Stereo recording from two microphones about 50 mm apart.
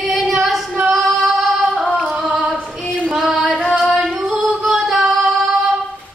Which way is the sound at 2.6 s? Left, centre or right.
Centre.